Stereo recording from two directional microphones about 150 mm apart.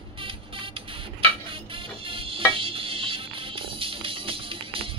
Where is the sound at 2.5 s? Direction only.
35° right (ahead or behind).